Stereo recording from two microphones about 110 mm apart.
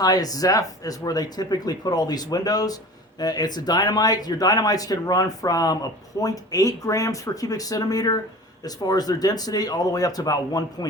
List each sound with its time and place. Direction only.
0.0 s speech: 35° left (ahead or behind)